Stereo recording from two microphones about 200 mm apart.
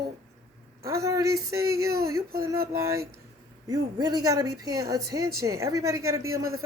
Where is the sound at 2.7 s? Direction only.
15° right (ahead or behind).